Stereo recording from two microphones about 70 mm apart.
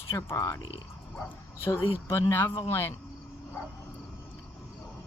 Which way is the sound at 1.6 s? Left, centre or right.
Left.